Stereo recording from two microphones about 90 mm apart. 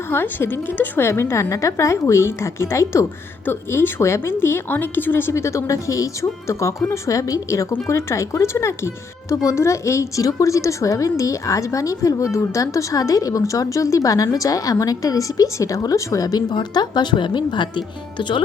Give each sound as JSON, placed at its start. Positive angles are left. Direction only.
{"t": 0.1, "sound": "a woman's voice", "side_deg": 25}